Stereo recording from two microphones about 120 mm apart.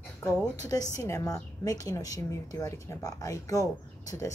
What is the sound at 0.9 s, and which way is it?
A woman's voice, 25° left (ahead or behind).